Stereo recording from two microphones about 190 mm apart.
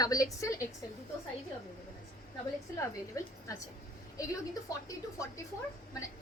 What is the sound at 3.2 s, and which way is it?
A woman's voice, 15° left (ahead or behind).